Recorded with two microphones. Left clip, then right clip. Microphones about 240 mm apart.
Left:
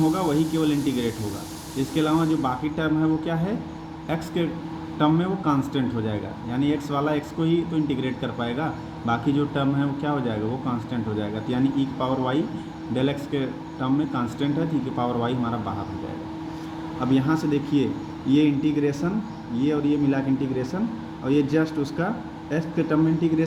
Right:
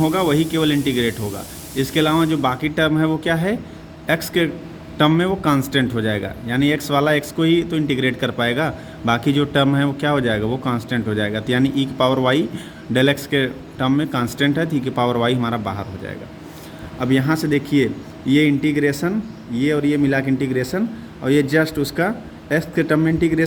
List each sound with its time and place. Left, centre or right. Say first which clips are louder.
0.1 s speech: right 5 dB; right
17.0 s a man's voice: right 4 dB; right